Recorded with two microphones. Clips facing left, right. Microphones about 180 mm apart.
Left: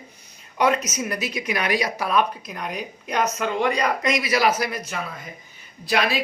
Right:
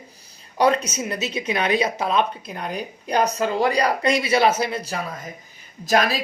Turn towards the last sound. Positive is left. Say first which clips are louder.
# right 3 dB
turn(degrees=-45)  # may be behind; listen again after turning